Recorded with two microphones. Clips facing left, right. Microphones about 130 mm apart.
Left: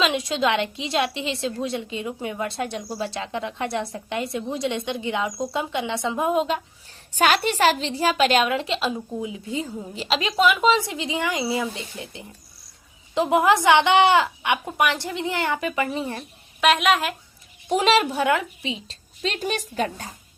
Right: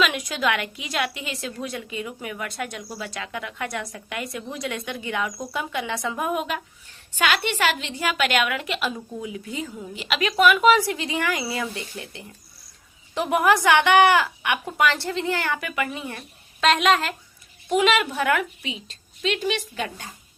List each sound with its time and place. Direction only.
0.0 s a woman's voice: 25° left (ahead or behind)
7.1 s a woman's voice: 40° left (ahead or behind)
16.6 s a woman's voice: 5° left (ahead or behind)
17.7 s a woman's voice: 35° left (ahead or behind)